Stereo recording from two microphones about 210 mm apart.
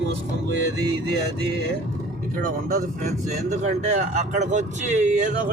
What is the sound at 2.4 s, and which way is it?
Speech, 40° right (ahead or behind).